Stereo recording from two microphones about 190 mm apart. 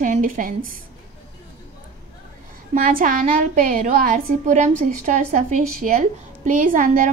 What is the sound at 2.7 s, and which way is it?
A woman's voice, 50° right (ahead or behind).